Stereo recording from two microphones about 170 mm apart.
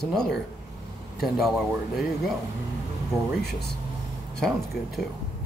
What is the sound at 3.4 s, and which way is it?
Speech, 70° left (ahead or behind).